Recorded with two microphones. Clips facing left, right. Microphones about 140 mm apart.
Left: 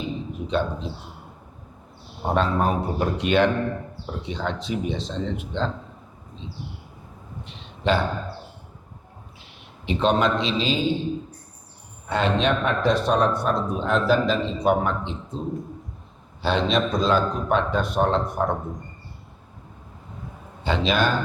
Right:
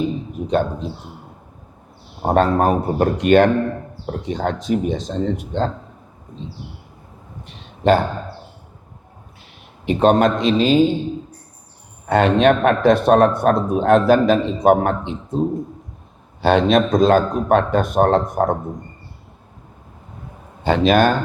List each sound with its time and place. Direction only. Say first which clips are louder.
0.0 s speech: right 7 dB; 45° right (ahead or behind)
2.2 s a man's voice: right 6 dB; 50° right (ahead or behind)
7.4 s a sound: right 8 dB; 45° right (ahead or behind)
9.8 s a man's voice: right 6 dB; 50° right (ahead or behind)
12.0 s a man's voice: right 8 dB; 55° right (ahead or behind)
20.7 s a man's voice: right 7 dB; 50° right (ahead or behind)